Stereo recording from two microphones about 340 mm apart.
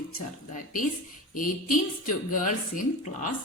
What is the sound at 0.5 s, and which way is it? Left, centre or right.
Speech, left.